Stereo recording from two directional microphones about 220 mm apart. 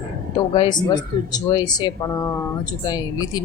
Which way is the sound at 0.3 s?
20° left (ahead or behind).